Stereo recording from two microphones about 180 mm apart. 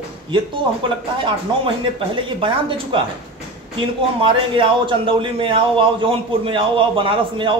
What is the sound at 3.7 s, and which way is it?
A man's voice, 30° right (ahead or behind).